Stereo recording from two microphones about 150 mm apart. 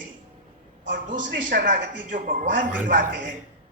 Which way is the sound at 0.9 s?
80° right.